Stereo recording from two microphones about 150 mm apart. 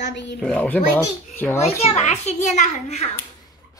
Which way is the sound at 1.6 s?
45° left (ahead or behind).